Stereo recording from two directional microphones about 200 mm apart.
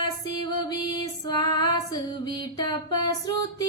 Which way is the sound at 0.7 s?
20° left (ahead or behind).